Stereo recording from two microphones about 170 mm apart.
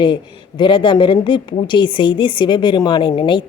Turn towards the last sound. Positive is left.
turn(degrees=30)  # may be behind; listen again after turning